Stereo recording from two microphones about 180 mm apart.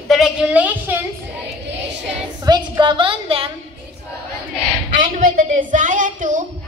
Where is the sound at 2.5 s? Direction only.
25° right (ahead or behind).